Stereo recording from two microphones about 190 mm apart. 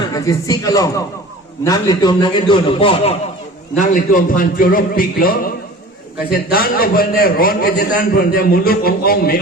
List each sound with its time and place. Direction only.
0.1 s a man's voice: 20° left (ahead or behind)
3.8 s a man's voice: 45° left (ahead or behind)